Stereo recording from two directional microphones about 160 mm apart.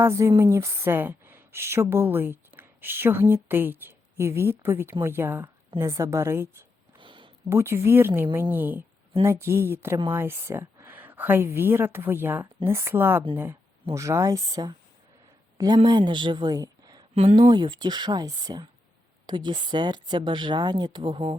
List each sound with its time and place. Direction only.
0.0 s a woman's voice: 15° right (ahead or behind)
7.0 s a sound: 30° right (ahead or behind)
7.5 s speech: 15° right (ahead or behind); by 21.3 s 35° right (ahead or behind)